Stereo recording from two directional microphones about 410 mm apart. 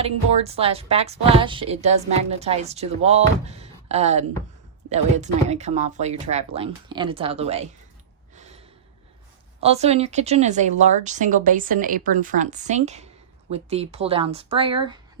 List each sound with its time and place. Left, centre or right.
0.0 s a woman's voice: centre
9.6 s a woman's voice: centre